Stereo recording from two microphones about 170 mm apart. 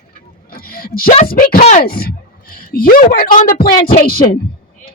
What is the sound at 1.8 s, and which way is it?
Speech, 60° left (ahead or behind).